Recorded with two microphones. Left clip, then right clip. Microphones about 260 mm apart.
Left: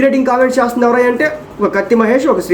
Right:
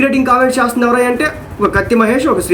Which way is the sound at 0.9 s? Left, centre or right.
Centre.